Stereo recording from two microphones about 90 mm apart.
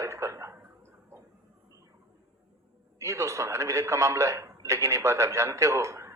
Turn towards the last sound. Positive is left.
turn(degrees=-35)  # may be behind; listen again after turning